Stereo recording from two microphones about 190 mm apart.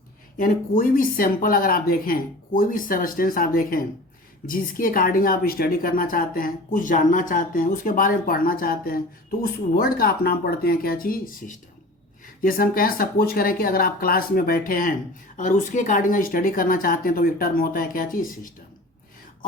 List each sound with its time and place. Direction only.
0.3 s a woman's voice: 45° left (ahead or behind)